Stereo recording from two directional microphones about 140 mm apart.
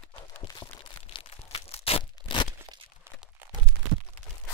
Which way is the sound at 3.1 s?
20° right (ahead or behind).